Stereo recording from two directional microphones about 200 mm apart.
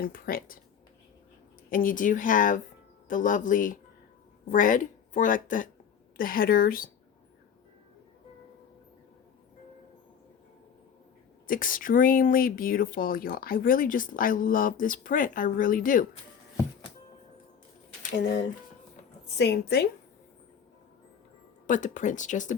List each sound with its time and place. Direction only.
0.0 s speech: 45° left (ahead or behind)
1.7 s a woman's voice: 40° left (ahead or behind)
11.4 s speech: 45° left (ahead or behind)
19.4 s a woman's voice: 55° left (ahead or behind)
21.7 s speech: 40° left (ahead or behind)